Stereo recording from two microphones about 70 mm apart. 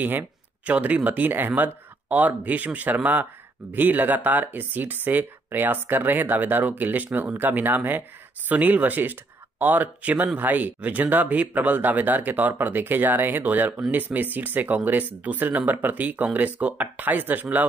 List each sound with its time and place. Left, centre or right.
0.7 s speech: centre